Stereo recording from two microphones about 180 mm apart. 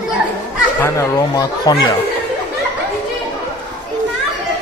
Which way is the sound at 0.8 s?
20° left (ahead or behind).